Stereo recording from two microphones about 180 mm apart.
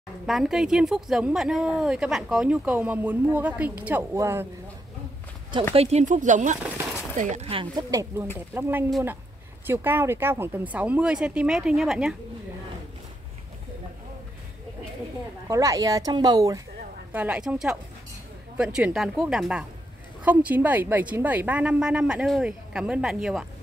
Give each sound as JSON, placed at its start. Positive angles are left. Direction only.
{"t": 0.3, "sound": "speech", "side_deg": 0}
{"t": 5.8, "sound": "speech", "side_deg": -35}
{"t": 6.6, "sound": "a sound", "side_deg": -5}
{"t": 7.2, "sound": "speech", "side_deg": -40}
{"t": 7.9, "sound": "a woman's voice", "side_deg": -15}
{"t": 15.4, "sound": "speech", "side_deg": -20}
{"t": 17.1, "sound": "a woman's voice", "side_deg": -5}